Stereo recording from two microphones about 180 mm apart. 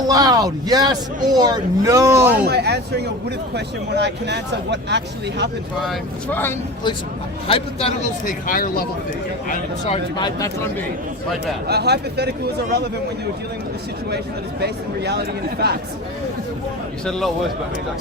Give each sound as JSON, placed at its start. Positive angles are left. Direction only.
{"t": 0.1, "sound": "a man's voice", "side_deg": -20}
{"t": 2.3, "sound": "speech", "side_deg": -65}
{"t": 5.8, "sound": "speech", "side_deg": 0}
{"t": 7.4, "sound": "a man's voice", "side_deg": 35}
{"t": 8.2, "sound": "a man's voice", "side_deg": 50}
{"t": 10.2, "sound": "speech", "side_deg": 25}
{"t": 11.7, "sound": "speech", "side_deg": -65}
{"t": 14.6, "sound": "speech", "side_deg": -65}
{"t": 17.1, "sound": "speech", "side_deg": 0}